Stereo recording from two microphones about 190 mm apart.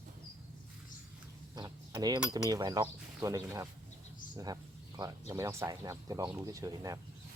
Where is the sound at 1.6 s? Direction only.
20° right (ahead or behind).